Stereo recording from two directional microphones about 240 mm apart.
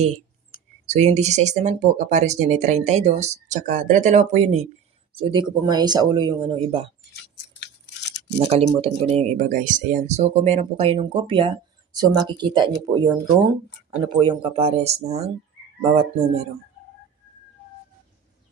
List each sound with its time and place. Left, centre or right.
0.9 s speech: right
7.6 s a sound: left
8.4 s speech: right
14.0 s speech: right